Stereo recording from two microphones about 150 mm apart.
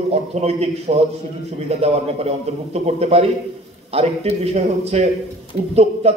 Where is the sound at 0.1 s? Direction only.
45° right (ahead or behind).